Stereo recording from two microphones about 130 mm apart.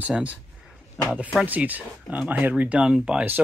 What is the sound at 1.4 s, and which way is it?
Speech, 10° right (ahead or behind).